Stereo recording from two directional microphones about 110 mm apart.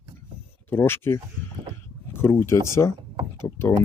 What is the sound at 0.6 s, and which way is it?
Speech, 20° left (ahead or behind).